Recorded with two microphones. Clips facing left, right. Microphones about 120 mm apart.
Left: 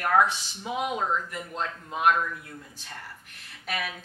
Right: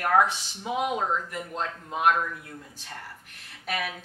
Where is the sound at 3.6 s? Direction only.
45° right (ahead or behind).